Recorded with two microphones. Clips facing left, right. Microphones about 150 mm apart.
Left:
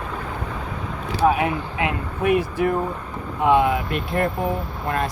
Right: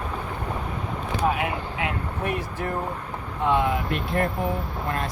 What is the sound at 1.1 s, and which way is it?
Speech, 25° left (ahead or behind).